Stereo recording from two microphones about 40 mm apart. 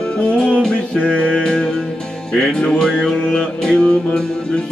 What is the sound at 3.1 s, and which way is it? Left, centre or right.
Music, left.